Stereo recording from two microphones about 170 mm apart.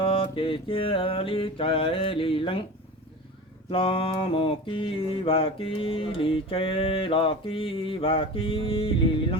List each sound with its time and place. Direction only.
0.0 s mantra: 30° left (ahead or behind)
3.7 s mantra: 30° left (ahead or behind)